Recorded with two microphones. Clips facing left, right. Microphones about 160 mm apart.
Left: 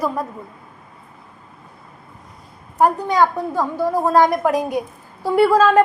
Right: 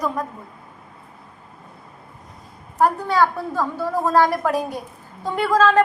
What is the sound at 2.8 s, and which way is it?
A woman's voice, 15° left (ahead or behind).